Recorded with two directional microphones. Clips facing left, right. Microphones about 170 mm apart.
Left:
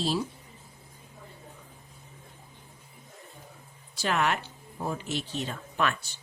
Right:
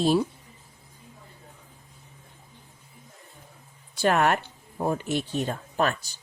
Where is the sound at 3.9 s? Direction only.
50° right (ahead or behind).